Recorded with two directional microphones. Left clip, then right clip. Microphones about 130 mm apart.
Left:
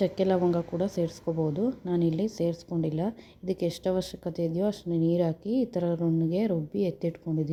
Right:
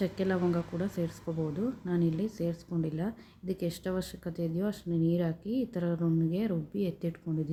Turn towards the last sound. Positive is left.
turn(degrees=30)  # may be behind; listen again after turning